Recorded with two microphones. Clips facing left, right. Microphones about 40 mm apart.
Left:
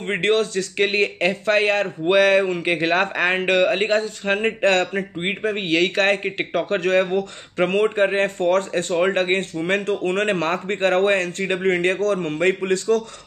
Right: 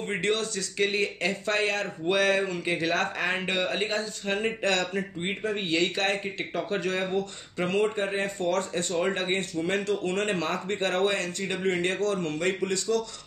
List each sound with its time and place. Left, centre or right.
0.0 s speech: left